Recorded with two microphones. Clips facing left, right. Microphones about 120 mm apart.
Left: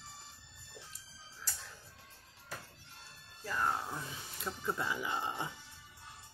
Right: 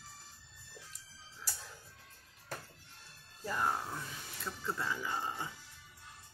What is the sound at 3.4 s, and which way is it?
Speech, 15° right (ahead or behind).